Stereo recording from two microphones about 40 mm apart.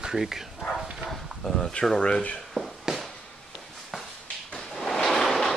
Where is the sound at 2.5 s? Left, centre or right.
Centre.